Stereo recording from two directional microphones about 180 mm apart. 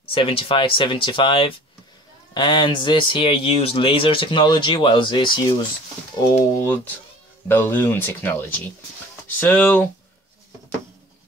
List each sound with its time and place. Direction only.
0.1 s speech: 30° left (ahead or behind)
6.3 s speech: 10° left (ahead or behind)